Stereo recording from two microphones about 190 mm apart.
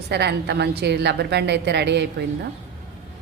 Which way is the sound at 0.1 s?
60° right (ahead or behind).